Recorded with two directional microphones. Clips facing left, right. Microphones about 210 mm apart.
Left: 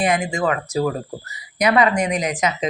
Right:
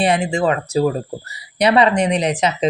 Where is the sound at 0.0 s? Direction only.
30° right (ahead or behind).